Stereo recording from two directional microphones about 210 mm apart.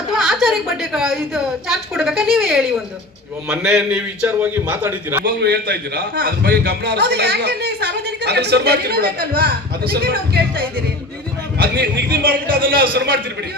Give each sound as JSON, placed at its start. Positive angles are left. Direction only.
{"t": 0.2, "sound": "a woman's voice", "side_deg": 0}
{"t": 5.2, "sound": "a man's voice", "side_deg": -50}